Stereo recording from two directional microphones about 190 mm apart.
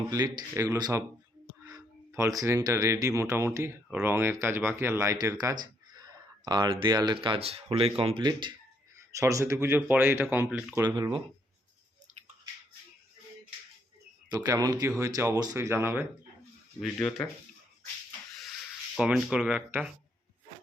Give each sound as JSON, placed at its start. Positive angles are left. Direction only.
{"t": 0.1, "sound": "speech", "side_deg": -20}
{"t": 10.8, "sound": "speech", "side_deg": -25}
{"t": 14.3, "sound": "speech", "side_deg": -20}
{"t": 16.8, "sound": "speech", "side_deg": 5}
{"t": 18.9, "sound": "speech", "side_deg": -5}